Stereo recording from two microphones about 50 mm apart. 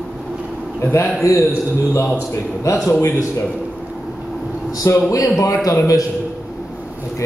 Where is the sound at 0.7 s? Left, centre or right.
Left.